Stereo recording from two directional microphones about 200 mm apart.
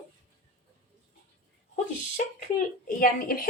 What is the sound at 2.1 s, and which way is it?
A woman's voice, 45° left (ahead or behind).